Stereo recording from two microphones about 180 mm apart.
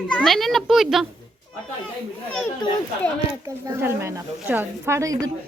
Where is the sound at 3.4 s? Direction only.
15° right (ahead or behind).